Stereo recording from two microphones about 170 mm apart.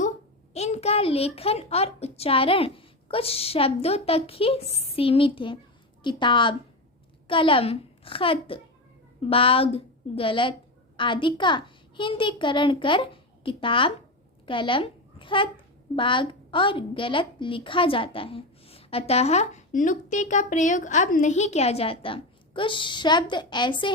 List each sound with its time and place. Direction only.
0.5 s a woman's voice: 40° left (ahead or behind)